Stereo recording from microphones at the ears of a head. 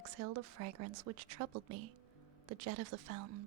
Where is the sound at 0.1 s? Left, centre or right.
Right.